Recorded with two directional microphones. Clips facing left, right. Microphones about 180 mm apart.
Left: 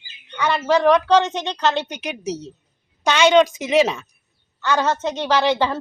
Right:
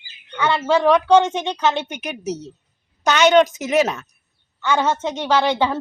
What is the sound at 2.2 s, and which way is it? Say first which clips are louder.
Speech: right 1 dB; 45° right (ahead or behind).